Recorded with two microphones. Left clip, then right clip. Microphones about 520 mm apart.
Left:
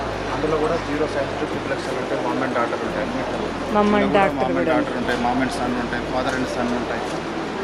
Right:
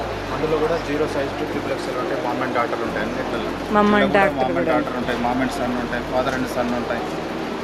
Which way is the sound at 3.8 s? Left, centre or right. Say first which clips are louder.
Right 1 dB; right.